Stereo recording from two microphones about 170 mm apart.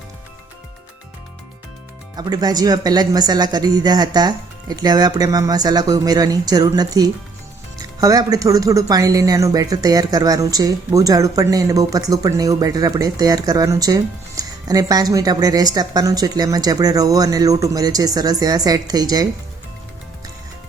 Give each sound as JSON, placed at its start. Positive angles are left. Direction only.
{"t": 2.1, "sound": "speech", "side_deg": -25}